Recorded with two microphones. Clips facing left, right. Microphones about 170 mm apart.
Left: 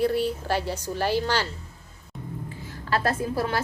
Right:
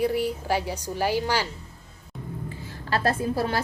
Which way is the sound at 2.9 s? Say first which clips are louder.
Right 1 dB; 30° right (ahead or behind).